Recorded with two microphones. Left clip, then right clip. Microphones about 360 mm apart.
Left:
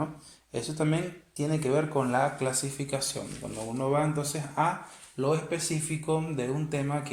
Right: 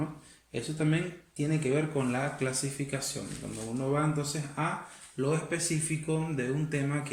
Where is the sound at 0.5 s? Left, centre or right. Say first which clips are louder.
Left 2 dB; left.